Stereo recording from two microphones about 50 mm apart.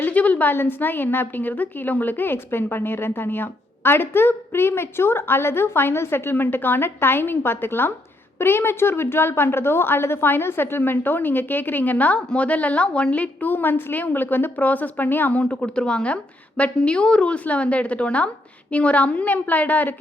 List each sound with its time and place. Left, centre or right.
0.0 s a sound: left
0.5 s a woman's voice: left
13.5 s a woman's voice: left
15.3 s a woman's voice: left